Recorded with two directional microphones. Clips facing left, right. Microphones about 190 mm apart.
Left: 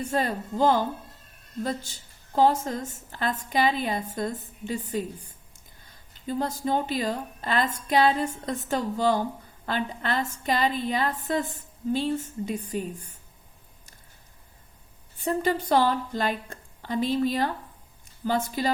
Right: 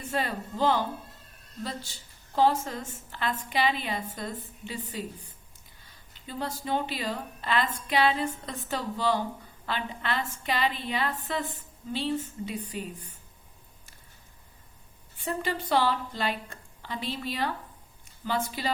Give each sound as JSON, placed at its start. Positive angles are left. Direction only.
{"t": 0.1, "sound": "a woman's voice", "side_deg": 45}
{"t": 15.2, "sound": "a woman's voice", "side_deg": 45}